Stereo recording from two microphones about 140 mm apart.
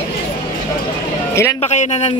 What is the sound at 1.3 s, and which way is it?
Speech, 20° left (ahead or behind).